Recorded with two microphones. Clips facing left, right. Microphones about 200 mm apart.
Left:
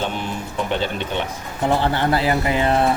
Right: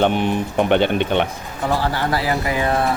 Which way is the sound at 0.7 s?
65° right (ahead or behind).